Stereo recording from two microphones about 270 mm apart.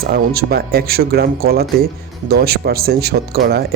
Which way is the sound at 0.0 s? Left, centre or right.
Right.